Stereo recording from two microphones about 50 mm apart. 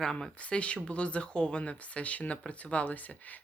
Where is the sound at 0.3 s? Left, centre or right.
Left.